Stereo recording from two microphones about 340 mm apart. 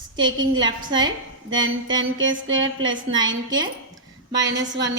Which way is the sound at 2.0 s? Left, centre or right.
Right.